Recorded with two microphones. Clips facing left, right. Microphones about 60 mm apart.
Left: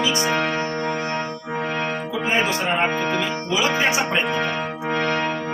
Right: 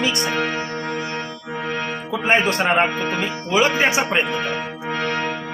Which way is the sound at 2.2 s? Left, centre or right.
Right.